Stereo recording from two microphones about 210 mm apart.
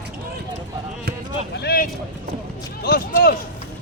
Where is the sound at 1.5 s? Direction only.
50° left (ahead or behind).